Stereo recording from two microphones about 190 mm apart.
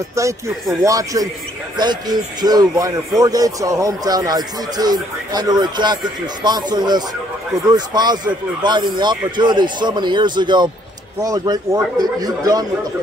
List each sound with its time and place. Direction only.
0.1 s speech: 15° right (ahead or behind)